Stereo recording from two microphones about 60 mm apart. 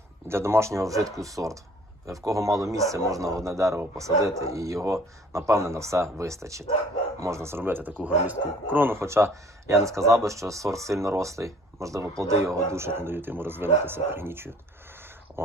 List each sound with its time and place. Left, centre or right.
0.3 s speech: right
9.0 s speech: right